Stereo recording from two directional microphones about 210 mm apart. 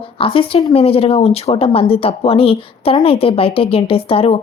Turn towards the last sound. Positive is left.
turn(degrees=25)  # may be behind; listen again after turning